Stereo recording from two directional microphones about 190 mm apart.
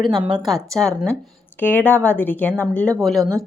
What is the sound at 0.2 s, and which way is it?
Speech, 5° right (ahead or behind).